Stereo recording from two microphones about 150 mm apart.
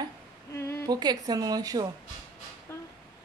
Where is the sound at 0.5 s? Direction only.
20° left (ahead or behind).